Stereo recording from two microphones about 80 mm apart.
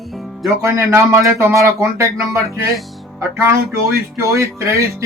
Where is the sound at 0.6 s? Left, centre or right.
Right.